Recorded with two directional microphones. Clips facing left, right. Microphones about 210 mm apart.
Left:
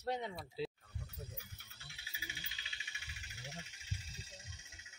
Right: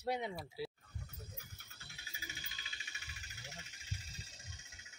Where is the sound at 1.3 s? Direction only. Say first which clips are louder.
Left 1 dB; 45° right (ahead or behind).